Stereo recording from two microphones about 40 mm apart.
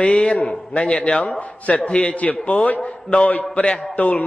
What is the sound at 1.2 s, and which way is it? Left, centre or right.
Speech, left.